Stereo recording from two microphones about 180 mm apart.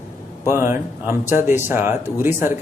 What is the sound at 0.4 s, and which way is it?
A man's voice, 15° right (ahead or behind).